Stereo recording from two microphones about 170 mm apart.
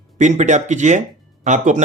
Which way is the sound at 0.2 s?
45° right (ahead or behind).